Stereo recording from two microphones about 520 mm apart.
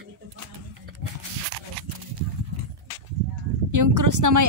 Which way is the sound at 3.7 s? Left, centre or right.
Right.